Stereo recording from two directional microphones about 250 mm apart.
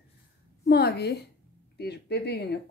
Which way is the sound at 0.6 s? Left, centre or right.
Left.